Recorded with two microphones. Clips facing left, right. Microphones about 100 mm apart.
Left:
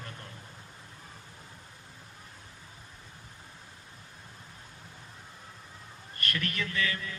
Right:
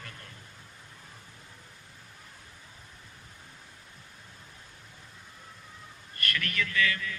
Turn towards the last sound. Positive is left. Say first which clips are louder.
# right 3 dB
turn(degrees=30)  # may be behind; listen again after turning